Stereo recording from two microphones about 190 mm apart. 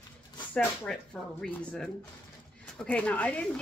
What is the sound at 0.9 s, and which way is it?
Speech, 5° left (ahead or behind).